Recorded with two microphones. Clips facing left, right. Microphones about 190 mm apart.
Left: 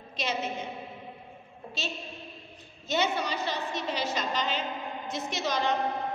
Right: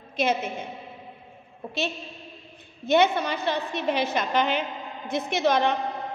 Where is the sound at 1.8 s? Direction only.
60° right (ahead or behind).